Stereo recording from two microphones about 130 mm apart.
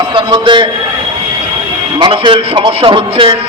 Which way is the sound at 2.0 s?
35° right (ahead or behind).